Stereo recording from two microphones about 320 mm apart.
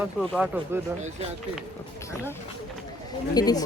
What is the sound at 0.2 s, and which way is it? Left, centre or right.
Speech, centre.